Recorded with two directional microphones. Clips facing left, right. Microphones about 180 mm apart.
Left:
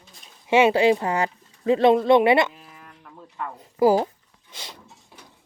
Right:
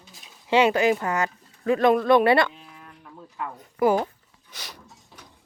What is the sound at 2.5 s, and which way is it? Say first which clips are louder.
Livestock: even; centre (ahead or behind).